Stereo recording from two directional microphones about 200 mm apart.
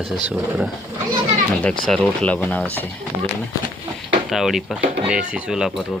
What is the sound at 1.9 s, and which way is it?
Speech, 5° left (ahead or behind).